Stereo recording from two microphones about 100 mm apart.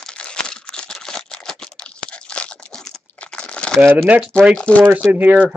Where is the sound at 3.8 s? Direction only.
15° right (ahead or behind).